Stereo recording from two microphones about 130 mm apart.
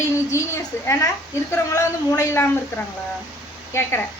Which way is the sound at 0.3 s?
20° left (ahead or behind).